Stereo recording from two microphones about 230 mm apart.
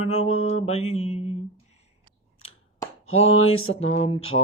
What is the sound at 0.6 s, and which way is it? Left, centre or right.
Speech, left.